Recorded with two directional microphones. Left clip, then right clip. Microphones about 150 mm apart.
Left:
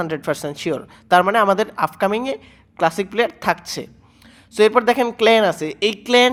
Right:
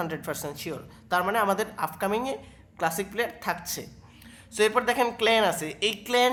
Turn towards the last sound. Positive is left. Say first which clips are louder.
# left 9 dB
turn(degrees=40)  # may be behind; listen again after turning